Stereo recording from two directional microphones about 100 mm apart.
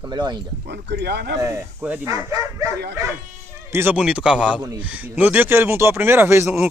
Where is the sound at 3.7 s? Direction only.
25° right (ahead or behind).